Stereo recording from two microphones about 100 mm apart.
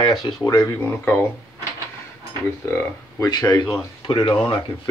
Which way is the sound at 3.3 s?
45° left (ahead or behind).